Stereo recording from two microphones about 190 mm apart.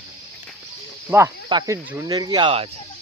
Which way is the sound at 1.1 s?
10° right (ahead or behind).